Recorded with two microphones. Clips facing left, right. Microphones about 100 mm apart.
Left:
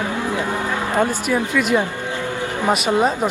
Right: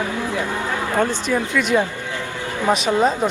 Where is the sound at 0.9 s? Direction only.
5° left (ahead or behind).